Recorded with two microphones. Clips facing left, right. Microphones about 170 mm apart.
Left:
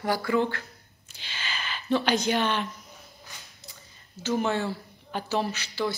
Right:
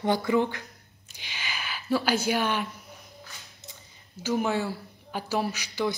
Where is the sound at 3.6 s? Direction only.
20° right (ahead or behind).